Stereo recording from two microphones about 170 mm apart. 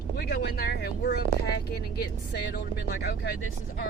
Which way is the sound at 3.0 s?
80° left.